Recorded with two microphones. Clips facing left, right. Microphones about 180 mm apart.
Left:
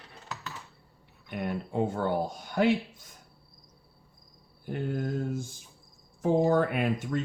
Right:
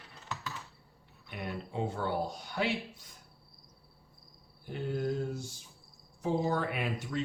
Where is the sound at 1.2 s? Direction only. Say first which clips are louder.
Left 6 dB; 50° left (ahead or behind).